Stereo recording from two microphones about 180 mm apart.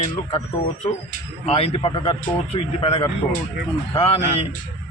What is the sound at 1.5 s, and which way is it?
A man's voice, 30° left (ahead or behind).